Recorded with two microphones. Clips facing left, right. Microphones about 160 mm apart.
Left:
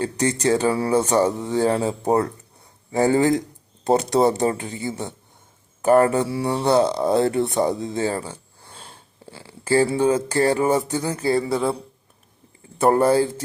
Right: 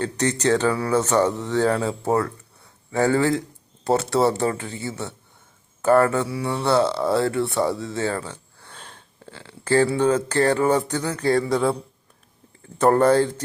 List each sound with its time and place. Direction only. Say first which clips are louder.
0.0 s speech: left 1 dB; 10° left (ahead or behind)
0.7 s mantra: left 2 dB; 25° left (ahead or behind)
0.9 s speech: even; 10° left (ahead or behind)
6.2 s mantra: left 3 dB; 30° left (ahead or behind)
6.7 s speech: left 1 dB; 15° left (ahead or behind)